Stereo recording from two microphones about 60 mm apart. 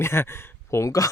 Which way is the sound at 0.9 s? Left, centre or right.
Left.